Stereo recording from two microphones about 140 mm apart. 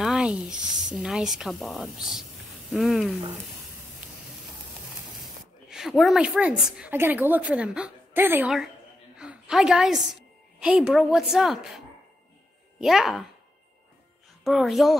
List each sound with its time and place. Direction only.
0.0 s a woman's voice: 5° right (ahead or behind)
5.2 s speech: centre (ahead or behind)
9.2 s a woman's voice: 5° right (ahead or behind)
12.8 s a woman's voice: centre (ahead or behind)
14.4 s a woman's voice: centre (ahead or behind)